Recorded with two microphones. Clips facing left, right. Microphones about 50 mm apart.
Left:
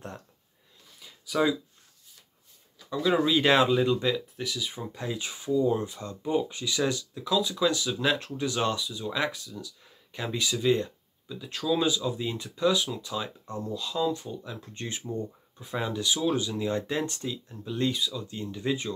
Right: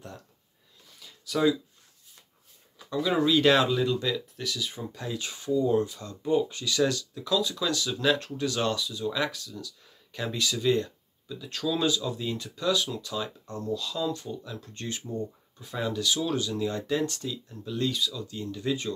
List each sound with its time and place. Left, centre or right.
0.9 s a sound: centre
2.9 s speech: centre
3.3 s speech: centre